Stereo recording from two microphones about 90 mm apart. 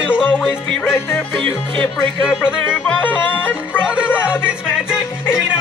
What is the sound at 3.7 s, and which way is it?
Music, 15° right (ahead or behind).